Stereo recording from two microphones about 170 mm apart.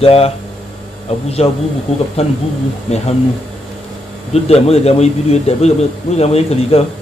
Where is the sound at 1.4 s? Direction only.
35° left (ahead or behind).